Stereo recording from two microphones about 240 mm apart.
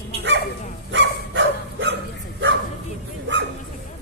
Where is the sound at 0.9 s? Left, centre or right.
Right.